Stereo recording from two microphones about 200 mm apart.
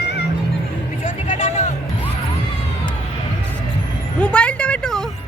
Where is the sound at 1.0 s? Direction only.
40° left (ahead or behind).